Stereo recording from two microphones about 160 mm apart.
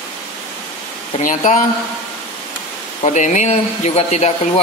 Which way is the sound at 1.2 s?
55° left (ahead or behind).